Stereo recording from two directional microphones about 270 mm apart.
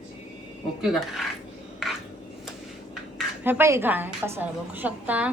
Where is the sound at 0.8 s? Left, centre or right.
Centre.